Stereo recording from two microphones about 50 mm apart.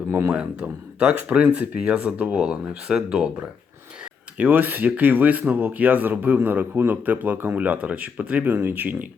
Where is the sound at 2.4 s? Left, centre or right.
Centre.